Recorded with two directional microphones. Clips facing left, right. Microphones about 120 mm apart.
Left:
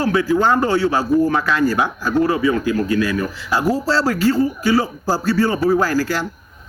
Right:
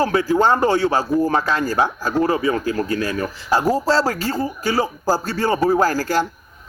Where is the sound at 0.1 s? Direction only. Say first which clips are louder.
Even; 35° right (ahead or behind).